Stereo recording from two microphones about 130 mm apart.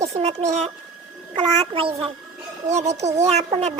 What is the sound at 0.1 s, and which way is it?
A woman's voice, 55° right (ahead or behind).